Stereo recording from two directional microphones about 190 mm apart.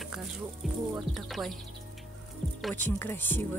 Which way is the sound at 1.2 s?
Centre (ahead or behind).